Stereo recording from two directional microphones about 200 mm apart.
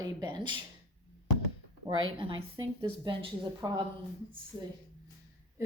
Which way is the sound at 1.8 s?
25° right (ahead or behind).